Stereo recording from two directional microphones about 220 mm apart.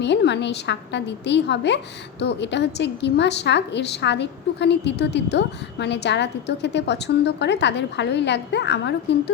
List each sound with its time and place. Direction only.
0.0 s a woman's voice: 50° left (ahead or behind)